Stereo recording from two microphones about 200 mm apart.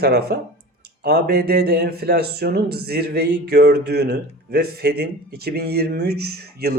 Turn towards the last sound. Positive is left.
turn(degrees=-50)  # may be behind; listen again after turning